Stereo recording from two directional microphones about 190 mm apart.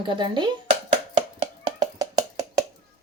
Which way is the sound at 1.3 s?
20° right (ahead or behind).